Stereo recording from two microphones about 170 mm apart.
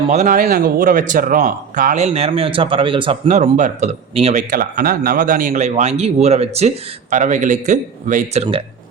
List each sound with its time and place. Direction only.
0.1 s speech: 45° right (ahead or behind)
2.1 s a man's voice: 35° right (ahead or behind)
3.2 s a man's voice: 45° right (ahead or behind)
4.5 s speech: 55° right (ahead or behind); by 8.6 s 35° right (ahead or behind)